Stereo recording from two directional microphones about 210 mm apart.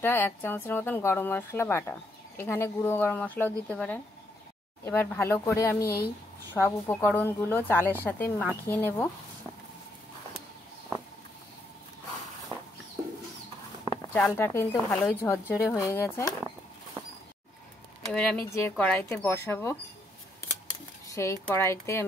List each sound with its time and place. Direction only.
0.0 s speech: 10° left (ahead or behind)
13.8 s speech: 10° left (ahead or behind)
18.0 s speech: 5° left (ahead or behind)
21.1 s speech: 15° left (ahead or behind)